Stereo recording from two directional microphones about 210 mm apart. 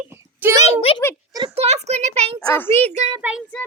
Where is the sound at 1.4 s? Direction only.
25° right (ahead or behind).